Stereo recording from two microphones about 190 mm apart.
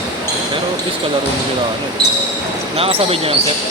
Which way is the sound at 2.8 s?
30° right (ahead or behind).